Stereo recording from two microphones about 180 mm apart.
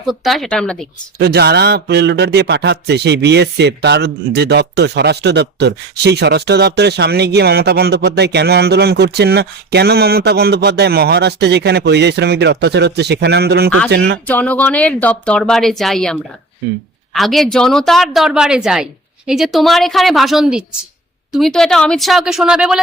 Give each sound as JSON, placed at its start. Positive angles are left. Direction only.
{"t": 0.0, "sound": "a woman's voice", "side_deg": 0}
{"t": 1.2, "sound": "a man's voice", "side_deg": -65}
{"t": 14.3, "sound": "a woman's voice", "side_deg": 10}
{"t": 17.2, "sound": "a woman's voice", "side_deg": 0}